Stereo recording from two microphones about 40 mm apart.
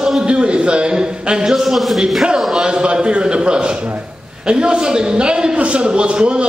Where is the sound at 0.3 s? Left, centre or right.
Right; by 2.0 s centre.